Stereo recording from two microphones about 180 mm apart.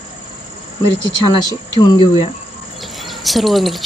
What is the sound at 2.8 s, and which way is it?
Bird, centre (ahead or behind).